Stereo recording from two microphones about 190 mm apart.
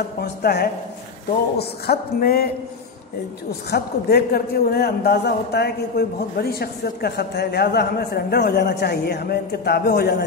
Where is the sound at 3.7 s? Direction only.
55° left (ahead or behind).